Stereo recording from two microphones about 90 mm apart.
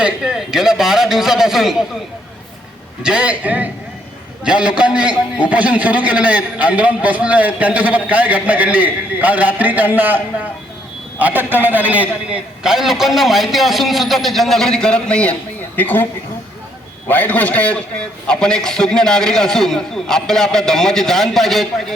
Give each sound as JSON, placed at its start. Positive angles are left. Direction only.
{"t": 0.0, "sound": "a man's voice", "side_deg": -10}
{"t": 3.0, "sound": "a man's voice", "side_deg": -10}
{"t": 11.2, "sound": "a man's voice", "side_deg": -20}
{"t": 12.6, "sound": "a man's voice", "side_deg": -5}
{"t": 17.1, "sound": "a man's voice", "side_deg": 20}